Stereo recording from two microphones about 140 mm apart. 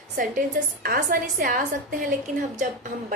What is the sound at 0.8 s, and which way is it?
Speech, 85° right.